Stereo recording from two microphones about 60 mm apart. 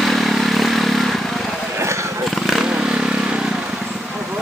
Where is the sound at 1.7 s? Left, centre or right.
Right.